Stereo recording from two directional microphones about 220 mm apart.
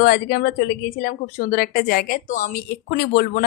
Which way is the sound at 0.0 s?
45° left (ahead or behind).